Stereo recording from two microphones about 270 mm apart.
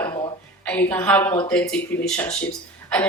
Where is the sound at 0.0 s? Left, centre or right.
Centre.